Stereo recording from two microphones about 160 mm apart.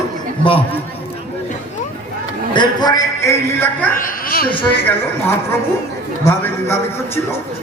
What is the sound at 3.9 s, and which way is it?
Speech, 60° left (ahead or behind).